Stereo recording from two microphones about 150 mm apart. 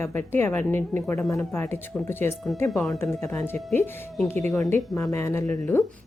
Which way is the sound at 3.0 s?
15° left (ahead or behind).